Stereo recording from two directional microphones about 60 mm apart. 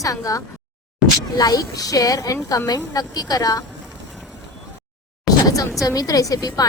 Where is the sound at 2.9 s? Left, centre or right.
Left.